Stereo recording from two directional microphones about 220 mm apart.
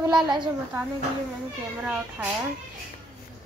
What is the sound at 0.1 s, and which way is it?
Speech, 20° right (ahead or behind).